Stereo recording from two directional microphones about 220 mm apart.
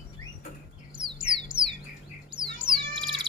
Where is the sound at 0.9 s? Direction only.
20° right (ahead or behind).